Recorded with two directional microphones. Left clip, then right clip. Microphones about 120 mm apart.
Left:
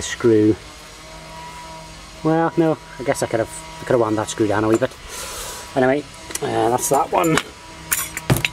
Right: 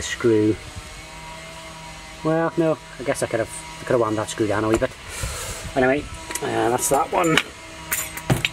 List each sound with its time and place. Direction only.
0.0 s speech: 15° left (ahead or behind)
2.2 s speech: 15° left (ahead or behind)
7.1 s speech: 20° left (ahead or behind)
7.9 s a sound: 35° left (ahead or behind)